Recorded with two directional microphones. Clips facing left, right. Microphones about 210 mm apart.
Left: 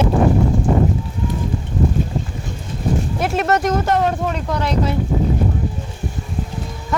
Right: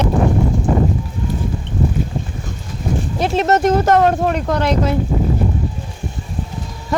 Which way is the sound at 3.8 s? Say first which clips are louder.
Right 5 dB; 55° right (ahead or behind).